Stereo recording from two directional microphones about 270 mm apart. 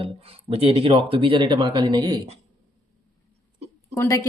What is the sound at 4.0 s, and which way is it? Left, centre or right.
Speech, centre.